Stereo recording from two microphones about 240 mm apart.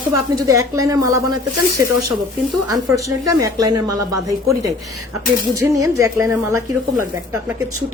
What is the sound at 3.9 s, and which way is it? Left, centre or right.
Speech, right.